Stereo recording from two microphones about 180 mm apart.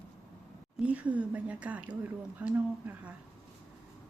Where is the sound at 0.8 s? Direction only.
5° right (ahead or behind).